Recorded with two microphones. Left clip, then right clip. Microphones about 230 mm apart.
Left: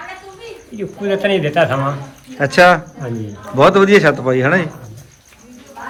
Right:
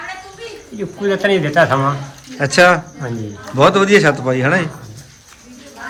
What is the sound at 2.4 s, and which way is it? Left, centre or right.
A man's voice, centre.